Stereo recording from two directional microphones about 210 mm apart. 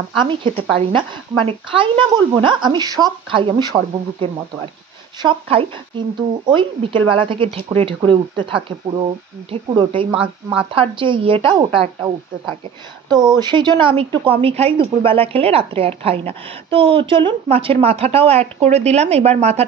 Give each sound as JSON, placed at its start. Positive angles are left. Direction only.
{"t": 0.2, "sound": "a woman's voice", "side_deg": -25}
{"t": 13.4, "sound": "a woman's voice", "side_deg": -20}